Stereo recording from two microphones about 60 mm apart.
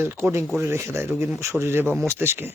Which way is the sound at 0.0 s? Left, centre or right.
Right.